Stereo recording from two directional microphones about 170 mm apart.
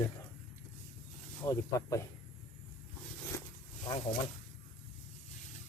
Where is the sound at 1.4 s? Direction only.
20° left (ahead or behind).